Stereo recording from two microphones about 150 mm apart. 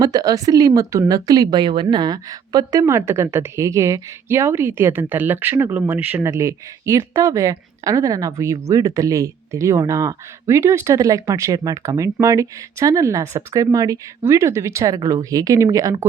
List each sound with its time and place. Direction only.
0.0 s speech: 25° right (ahead or behind)